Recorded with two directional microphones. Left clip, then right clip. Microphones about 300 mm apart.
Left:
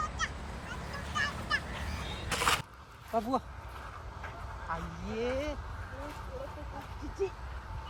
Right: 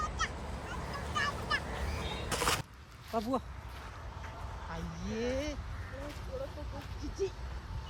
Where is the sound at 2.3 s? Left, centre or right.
Centre.